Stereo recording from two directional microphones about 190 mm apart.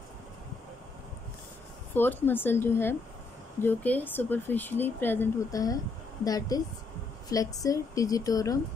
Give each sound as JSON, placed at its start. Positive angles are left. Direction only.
{"t": 2.0, "sound": "speech", "side_deg": 10}